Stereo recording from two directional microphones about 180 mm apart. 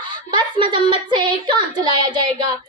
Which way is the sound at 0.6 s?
25° right (ahead or behind).